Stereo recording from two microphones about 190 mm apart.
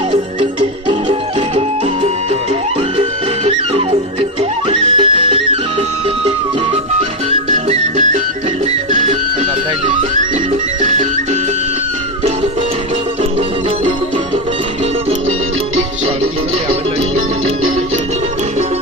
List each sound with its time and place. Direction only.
0.1 s music: 25° right (ahead or behind)
3.0 s music: 30° right (ahead or behind)
7.5 s music: 40° right (ahead or behind)